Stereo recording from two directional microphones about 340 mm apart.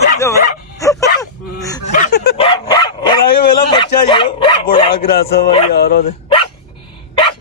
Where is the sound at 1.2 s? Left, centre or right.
Centre.